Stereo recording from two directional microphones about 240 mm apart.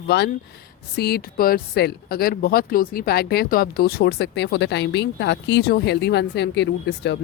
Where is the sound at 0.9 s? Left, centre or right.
Left.